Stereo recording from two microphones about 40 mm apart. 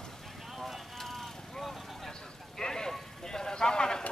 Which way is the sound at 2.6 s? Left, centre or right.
Centre.